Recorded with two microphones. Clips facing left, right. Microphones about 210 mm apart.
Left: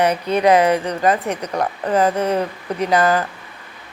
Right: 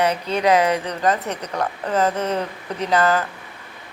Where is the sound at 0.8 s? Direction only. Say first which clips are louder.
Left 3 dB; 10° left (ahead or behind).